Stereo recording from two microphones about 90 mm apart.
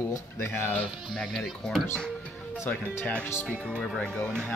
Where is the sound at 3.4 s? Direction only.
5° left (ahead or behind).